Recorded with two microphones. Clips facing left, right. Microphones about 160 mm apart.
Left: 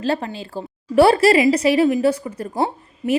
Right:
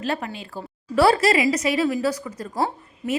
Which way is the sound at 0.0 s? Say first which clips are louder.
Left 5 dB; 30° left (ahead or behind).